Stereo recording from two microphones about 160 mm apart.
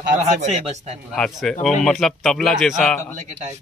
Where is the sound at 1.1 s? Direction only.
5° left (ahead or behind).